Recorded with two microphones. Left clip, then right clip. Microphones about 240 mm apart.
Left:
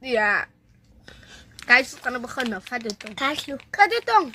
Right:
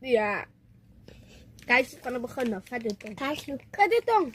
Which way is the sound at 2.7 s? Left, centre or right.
Centre.